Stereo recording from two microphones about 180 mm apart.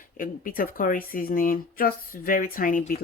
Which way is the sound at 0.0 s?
50° left (ahead or behind).